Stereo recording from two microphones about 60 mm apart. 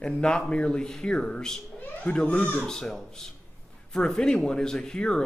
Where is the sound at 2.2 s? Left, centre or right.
Left.